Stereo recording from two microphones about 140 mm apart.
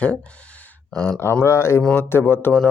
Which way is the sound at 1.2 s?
15° left (ahead or behind).